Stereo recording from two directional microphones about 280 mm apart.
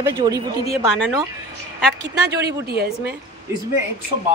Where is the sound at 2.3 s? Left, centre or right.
Right.